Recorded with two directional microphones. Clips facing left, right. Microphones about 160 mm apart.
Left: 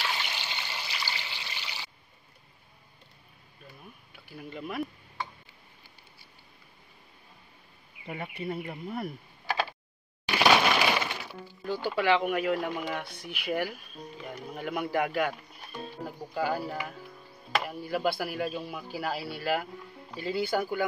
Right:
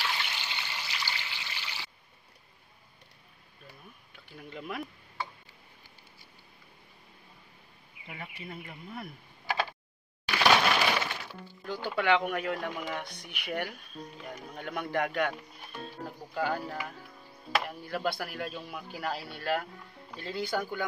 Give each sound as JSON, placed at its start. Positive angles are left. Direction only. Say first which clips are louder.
{"t": 0.1, "sound": "trickle", "louder": "left 1 dB", "side_deg": 20}
{"t": 4.3, "sound": "speech", "louder": "left 2 dB", "side_deg": 5}
{"t": 8.1, "sound": "speech", "louder": "left 8 dB", "side_deg": 40}
{"t": 10.2, "sound": "a sound", "louder": "left 2 dB", "side_deg": 20}
{"t": 10.5, "sound": "crushing", "louder": "left 1 dB", "side_deg": 5}
{"t": 11.6, "sound": "speech", "louder": "left 2 dB", "side_deg": 5}
{"t": 16.3, "sound": "a man's voice", "louder": "left 2 dB", "side_deg": 10}